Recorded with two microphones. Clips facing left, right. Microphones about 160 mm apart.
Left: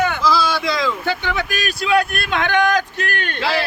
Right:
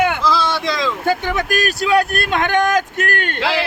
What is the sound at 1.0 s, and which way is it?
Speech, 45° right (ahead or behind).